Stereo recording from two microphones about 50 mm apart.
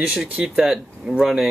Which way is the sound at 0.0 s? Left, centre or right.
Centre.